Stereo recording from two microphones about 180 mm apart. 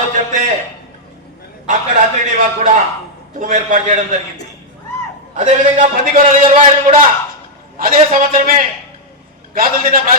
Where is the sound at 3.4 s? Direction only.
45° right (ahead or behind).